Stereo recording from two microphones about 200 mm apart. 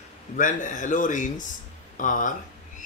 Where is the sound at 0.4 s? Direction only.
40° left (ahead or behind).